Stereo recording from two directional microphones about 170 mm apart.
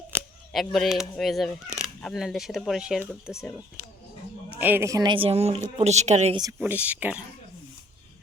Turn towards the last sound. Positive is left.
turn(degrees=-10)  # may be behind; listen again after turning